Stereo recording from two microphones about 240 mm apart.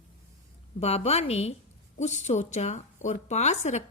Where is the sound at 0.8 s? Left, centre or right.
Left.